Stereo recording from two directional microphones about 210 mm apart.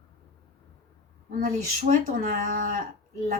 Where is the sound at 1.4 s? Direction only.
40° right (ahead or behind).